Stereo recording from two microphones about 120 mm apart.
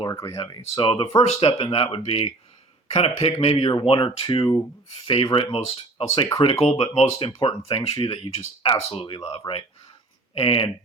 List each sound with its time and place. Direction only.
0.1 s speech: 30° left (ahead or behind)
0.8 s speech: 45° left (ahead or behind)
7.3 s speech: 40° left (ahead or behind)